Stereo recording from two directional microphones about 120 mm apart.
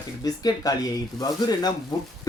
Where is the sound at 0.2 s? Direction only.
30° left (ahead or behind).